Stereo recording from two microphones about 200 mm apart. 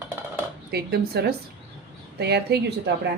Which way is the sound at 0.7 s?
55° right (ahead or behind).